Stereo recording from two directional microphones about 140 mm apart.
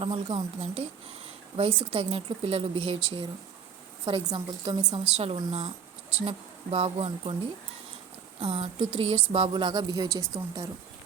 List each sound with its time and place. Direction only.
0.0 s a woman's voice: 40° right (ahead or behind)
5.0 s a woman's voice: 45° right (ahead or behind)
8.4 s speech: 45° right (ahead or behind); by 10.7 s 25° right (ahead or behind)